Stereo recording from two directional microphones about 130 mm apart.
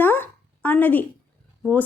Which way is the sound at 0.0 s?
15° left (ahead or behind).